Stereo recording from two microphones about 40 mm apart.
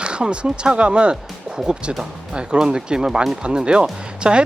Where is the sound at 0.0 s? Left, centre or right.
Right.